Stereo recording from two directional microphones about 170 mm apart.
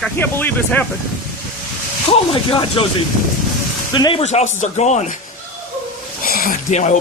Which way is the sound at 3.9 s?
25° left (ahead or behind).